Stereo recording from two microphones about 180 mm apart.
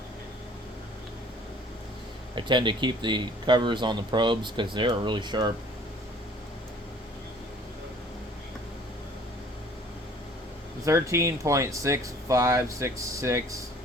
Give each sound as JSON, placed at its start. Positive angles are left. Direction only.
{"t": 2.3, "sound": "speech", "side_deg": -25}
{"t": 10.8, "sound": "speech", "side_deg": -15}